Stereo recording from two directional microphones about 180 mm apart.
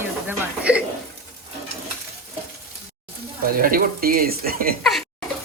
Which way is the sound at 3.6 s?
55° right (ahead or behind).